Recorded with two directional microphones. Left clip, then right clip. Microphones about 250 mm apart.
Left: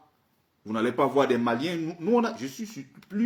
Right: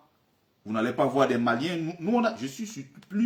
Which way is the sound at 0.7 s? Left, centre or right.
Centre.